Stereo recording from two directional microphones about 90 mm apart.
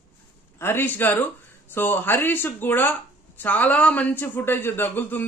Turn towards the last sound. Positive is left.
turn(degrees=20)  # may be behind; listen again after turning